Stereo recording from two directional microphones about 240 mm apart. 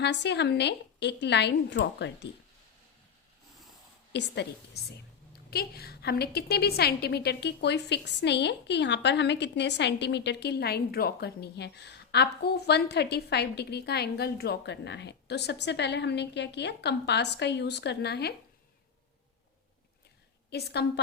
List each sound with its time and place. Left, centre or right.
0.0 s a woman's voice: left
4.1 s a woman's voice: left
20.5 s a woman's voice: left